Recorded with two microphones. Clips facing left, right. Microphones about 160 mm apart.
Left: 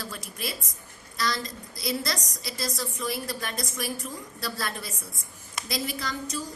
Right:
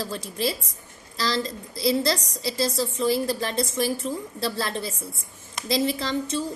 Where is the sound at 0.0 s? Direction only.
30° right (ahead or behind).